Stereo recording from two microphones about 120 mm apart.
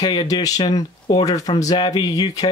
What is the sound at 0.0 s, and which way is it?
Speech, 35° left (ahead or behind).